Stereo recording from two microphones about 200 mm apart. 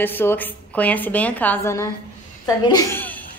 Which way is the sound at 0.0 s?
10° left (ahead or behind).